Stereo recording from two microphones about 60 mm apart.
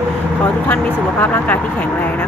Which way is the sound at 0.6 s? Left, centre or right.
Left.